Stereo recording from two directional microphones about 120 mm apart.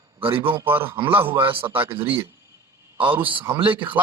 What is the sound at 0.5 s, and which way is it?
Speech, 15° right (ahead or behind).